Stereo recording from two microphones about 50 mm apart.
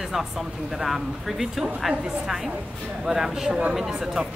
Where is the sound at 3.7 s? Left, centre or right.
Centre.